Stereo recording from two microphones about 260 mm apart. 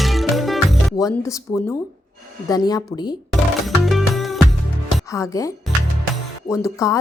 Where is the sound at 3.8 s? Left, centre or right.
Centre.